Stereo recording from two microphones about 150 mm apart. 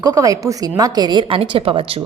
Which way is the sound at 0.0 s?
25° right (ahead or behind).